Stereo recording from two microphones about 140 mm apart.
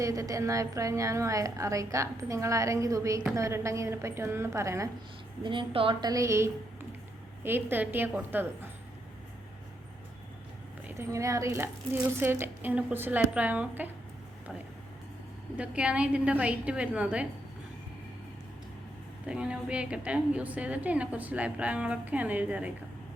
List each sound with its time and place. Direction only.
0.0 s a woman's voice: 25° right (ahead or behind)
5.4 s a woman's voice: 35° right (ahead or behind); by 8.7 s 15° right (ahead or behind)
10.8 s a woman's voice: 20° right (ahead or behind)
15.5 s a woman's voice: 10° right (ahead or behind)
19.2 s a woman's voice: 5° right (ahead or behind)